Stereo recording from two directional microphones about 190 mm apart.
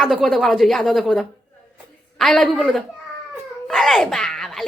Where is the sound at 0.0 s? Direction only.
Centre (ahead or behind).